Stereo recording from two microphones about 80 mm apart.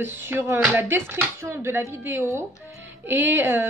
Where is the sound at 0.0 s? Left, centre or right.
Right.